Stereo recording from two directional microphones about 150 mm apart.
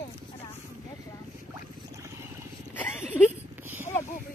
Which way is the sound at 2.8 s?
15° left (ahead or behind).